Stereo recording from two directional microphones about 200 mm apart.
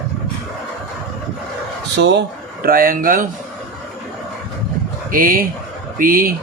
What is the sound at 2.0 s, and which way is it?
Speech, 60° right (ahead or behind).